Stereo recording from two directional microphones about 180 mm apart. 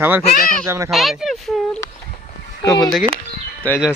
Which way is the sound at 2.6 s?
25° left (ahead or behind).